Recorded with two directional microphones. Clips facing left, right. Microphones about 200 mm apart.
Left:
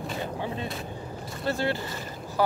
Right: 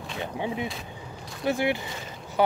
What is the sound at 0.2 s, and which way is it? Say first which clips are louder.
Speech: right 5 dB; 15° right (ahead or behind).